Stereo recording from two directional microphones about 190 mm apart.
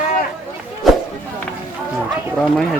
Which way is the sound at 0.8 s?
Centre (ahead or behind).